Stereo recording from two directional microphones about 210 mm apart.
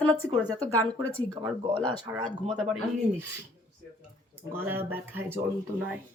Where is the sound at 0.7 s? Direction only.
10° left (ahead or behind).